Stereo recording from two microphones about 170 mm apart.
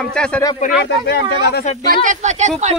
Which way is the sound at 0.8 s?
90° left.